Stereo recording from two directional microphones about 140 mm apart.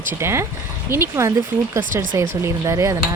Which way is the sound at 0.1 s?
20° right (ahead or behind).